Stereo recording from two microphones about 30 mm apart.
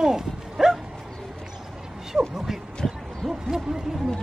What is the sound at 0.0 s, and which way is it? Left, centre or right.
Bow-wow, centre.